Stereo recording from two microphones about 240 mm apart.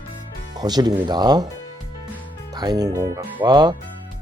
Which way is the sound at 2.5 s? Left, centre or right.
Centre.